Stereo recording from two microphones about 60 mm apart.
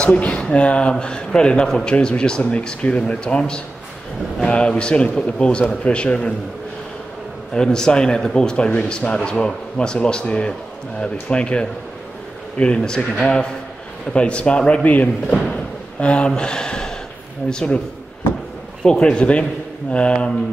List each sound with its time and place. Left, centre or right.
0.0 s speech: left
7.5 s speech: centre
15.3 s a sound: centre
17.5 s speech: centre
18.9 s speech: centre